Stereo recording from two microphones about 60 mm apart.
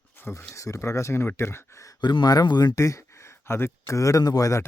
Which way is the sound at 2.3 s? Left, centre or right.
Left.